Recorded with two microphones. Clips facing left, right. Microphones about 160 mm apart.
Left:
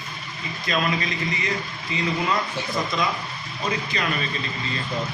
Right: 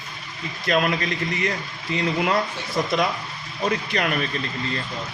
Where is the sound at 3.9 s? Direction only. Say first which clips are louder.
Right 3 dB; 60° right (ahead or behind).